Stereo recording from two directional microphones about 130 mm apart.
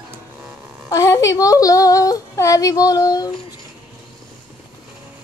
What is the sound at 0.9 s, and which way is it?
Speech, 25° left (ahead or behind).